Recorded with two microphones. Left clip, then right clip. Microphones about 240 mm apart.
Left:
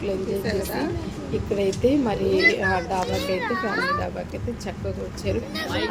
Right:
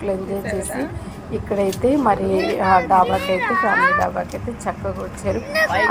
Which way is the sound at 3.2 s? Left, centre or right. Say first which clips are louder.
Right 6 dB; right.